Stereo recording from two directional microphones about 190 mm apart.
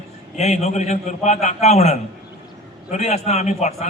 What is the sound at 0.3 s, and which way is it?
A man's voice, 35° left (ahead or behind).